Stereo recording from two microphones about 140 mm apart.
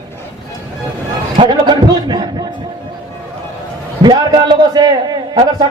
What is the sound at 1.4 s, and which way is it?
Speech, 30° right (ahead or behind).